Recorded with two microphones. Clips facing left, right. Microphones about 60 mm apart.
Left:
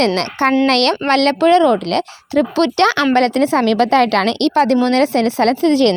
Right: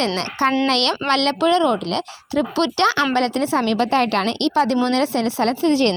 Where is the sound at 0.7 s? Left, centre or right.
Left.